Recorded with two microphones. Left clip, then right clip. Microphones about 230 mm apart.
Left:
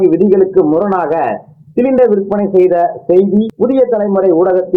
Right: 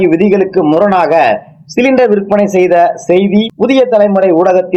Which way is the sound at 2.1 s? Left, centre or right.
Centre.